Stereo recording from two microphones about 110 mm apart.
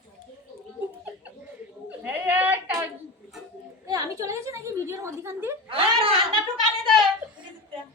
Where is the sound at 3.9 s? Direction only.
30° right (ahead or behind).